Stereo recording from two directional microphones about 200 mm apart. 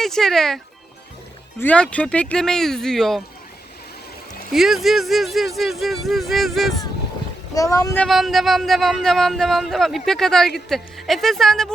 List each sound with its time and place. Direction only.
0.0 s speech: centre (ahead or behind)
4.5 s speech: centre (ahead or behind)
7.5 s speech: 15° left (ahead or behind)
8.0 s speech: centre (ahead or behind)